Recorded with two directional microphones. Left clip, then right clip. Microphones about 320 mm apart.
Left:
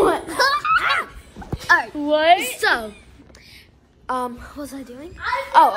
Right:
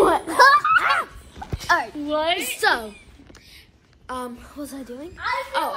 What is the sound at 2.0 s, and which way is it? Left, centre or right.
Speech, left.